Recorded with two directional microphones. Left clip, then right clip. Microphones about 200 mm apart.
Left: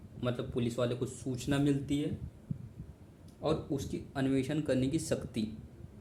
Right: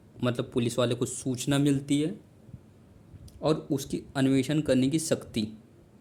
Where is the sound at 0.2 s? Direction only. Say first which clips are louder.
Right 6 dB; 55° right (ahead or behind).